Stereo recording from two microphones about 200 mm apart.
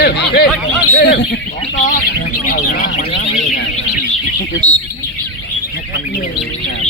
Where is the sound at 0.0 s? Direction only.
50° left (ahead or behind).